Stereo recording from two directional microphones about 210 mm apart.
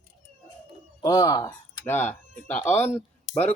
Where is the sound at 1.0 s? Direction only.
15° left (ahead or behind).